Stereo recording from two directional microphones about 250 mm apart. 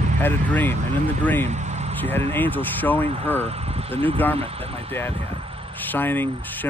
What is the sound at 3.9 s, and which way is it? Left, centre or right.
Speech, right.